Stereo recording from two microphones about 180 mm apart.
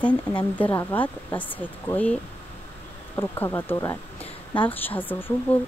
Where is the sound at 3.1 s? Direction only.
15° left (ahead or behind).